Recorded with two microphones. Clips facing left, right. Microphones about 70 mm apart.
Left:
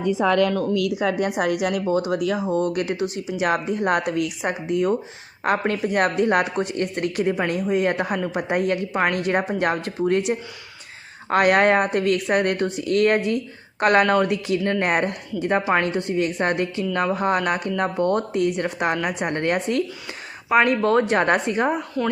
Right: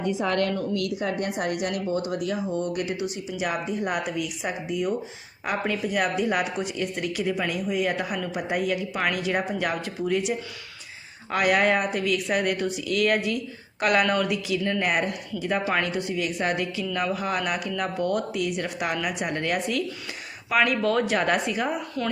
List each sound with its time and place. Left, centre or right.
1.4 s speech: left
15.6 s a woman's voice: left
16.0 s speech: left
20.5 s speech: left
22.0 s speech: centre